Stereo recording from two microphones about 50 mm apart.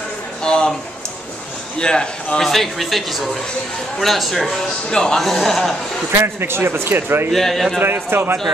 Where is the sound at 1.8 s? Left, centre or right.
Centre.